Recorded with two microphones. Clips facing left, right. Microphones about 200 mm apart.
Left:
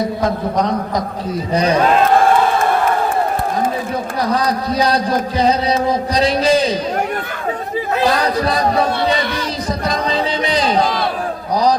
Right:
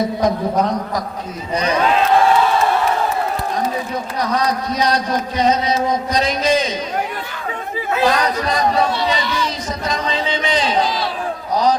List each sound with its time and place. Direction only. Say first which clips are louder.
1.5 s speech: left 4 dB; 35° left (ahead or behind)
1.8 s a man's voice: left 1 dB; 45° left (ahead or behind)
4.4 s speech: even; 30° left (ahead or behind)
7.9 s speech: left 1 dB; 35° left (ahead or behind)
9.1 s a sound: left 1 dB; 55° left (ahead or behind)
9.9 s speech: left 1 dB; 35° left (ahead or behind)